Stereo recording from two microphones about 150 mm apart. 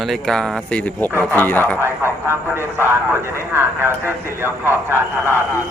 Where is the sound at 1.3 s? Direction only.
10° left (ahead or behind).